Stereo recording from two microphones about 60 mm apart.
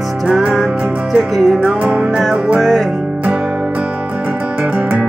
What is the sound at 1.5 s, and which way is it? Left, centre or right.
Music, centre.